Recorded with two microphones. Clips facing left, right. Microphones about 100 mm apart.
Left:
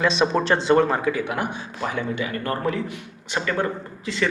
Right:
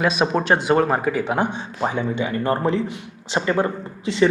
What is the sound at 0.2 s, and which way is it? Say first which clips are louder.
Speech: right 1 dB; 10° right (ahead or behind).